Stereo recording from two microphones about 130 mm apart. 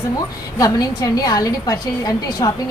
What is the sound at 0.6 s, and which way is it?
A woman's voice, 25° left (ahead or behind).